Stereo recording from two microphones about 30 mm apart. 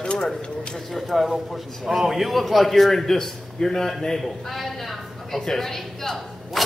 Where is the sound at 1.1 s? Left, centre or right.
Centre.